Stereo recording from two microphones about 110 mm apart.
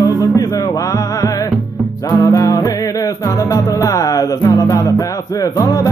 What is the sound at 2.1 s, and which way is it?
Music, 35° left (ahead or behind).